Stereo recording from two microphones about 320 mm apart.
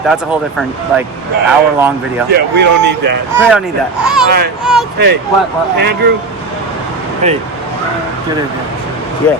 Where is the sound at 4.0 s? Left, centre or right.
Centre.